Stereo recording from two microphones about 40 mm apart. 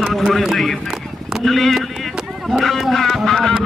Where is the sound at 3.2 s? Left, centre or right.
Centre.